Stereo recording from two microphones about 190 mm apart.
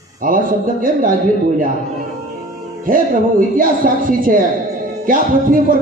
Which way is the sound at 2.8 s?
45° right (ahead or behind).